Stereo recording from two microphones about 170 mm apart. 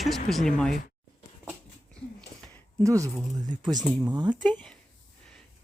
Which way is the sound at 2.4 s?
5° left (ahead or behind).